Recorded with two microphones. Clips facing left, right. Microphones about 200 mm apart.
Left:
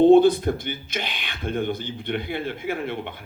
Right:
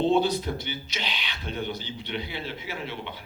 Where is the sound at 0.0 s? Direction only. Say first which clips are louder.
Left 9 dB; 50° left (ahead or behind).